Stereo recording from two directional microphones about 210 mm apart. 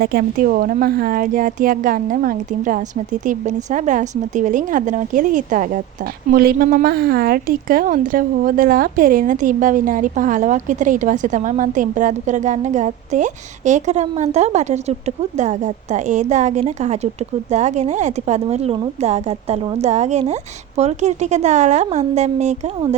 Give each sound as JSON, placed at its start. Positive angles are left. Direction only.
{"t": 0.0, "sound": "a woman's voice", "side_deg": -45}